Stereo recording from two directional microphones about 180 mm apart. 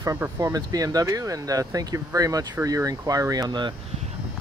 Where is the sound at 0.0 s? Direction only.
15° right (ahead or behind).